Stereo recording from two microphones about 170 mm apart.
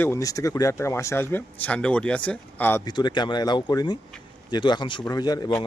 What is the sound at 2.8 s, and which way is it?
Speech, 25° left (ahead or behind).